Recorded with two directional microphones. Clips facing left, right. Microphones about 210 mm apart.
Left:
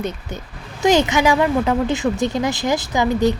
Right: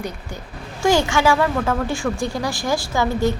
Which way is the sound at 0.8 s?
20° left (ahead or behind).